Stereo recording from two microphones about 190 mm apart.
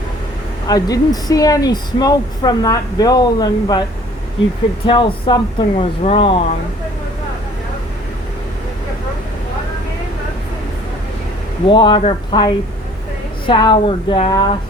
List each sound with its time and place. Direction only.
0.7 s a woman's voice: 20° left (ahead or behind)
4.9 s a woman's voice: 25° left (ahead or behind)
11.7 s a woman's voice: 25° left (ahead or behind)